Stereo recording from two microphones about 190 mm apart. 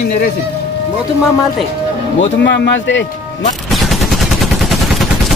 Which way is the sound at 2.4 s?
65° left (ahead or behind).